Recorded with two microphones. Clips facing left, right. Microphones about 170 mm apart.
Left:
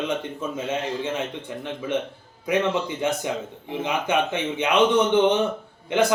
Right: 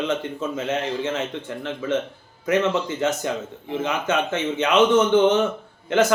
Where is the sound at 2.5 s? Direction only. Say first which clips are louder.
Right 2 dB; 15° left (ahead or behind).